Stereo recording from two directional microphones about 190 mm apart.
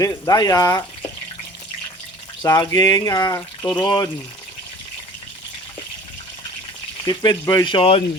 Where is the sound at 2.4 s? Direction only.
20° left (ahead or behind).